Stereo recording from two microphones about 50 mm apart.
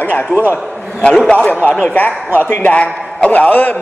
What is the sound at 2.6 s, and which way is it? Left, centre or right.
A man's voice, left.